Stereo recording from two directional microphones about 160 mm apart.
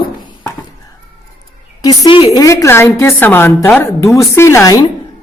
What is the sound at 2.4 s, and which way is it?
A woman's voice, 20° left (ahead or behind).